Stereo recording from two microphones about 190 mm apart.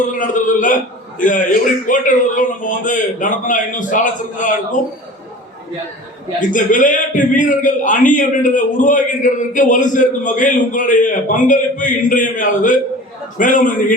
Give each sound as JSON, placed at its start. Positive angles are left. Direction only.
{"t": 0.0, "sound": "a man's voice", "side_deg": 45}
{"t": 1.9, "sound": "a man's voice", "side_deg": 45}
{"t": 6.5, "sound": "a man's voice", "side_deg": 45}